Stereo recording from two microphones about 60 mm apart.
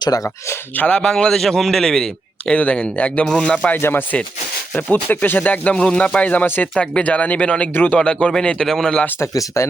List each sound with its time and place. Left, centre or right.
0.1 s speech: left
0.8 s a man's voice: centre
2.5 s a man's voice: left
3.8 s a man's voice: left
4.7 s speech: left
7.7 s a man's voice: left
7.9 s a man's voice: centre
9.6 s speech: left